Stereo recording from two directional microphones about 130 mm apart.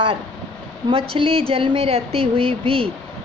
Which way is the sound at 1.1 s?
45° right (ahead or behind).